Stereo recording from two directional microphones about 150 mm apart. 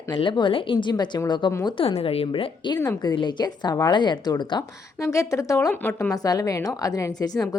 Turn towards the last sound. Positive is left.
turn(degrees=25)  # may be behind; listen again after turning